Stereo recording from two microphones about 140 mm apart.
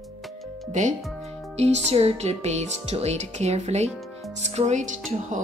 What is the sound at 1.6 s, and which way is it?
Speech, 50° right (ahead or behind).